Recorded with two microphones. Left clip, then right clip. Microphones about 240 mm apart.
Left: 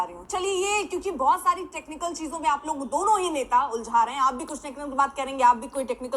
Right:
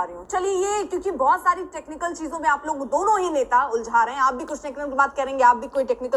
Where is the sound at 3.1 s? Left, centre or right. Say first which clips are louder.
Right 3 dB; centre.